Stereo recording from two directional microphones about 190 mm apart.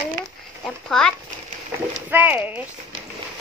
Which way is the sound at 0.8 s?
5° left (ahead or behind).